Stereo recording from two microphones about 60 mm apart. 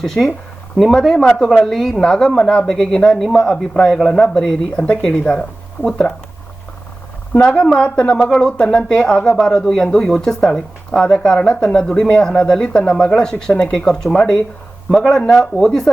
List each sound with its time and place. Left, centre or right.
0.0 s speech: centre
7.3 s speech: centre
15.2 s speech: centre